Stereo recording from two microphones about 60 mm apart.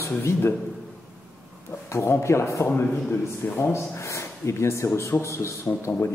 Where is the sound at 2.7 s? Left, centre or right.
Left.